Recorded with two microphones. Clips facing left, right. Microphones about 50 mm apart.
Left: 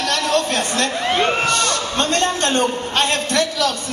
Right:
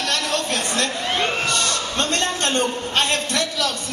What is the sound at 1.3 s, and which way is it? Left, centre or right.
A man's voice, left.